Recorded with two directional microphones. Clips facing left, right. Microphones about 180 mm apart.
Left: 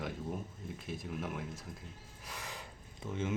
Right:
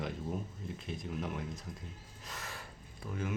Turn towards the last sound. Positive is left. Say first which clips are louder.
# left 2 dB
turn(degrees=25)  # may be behind; listen again after turning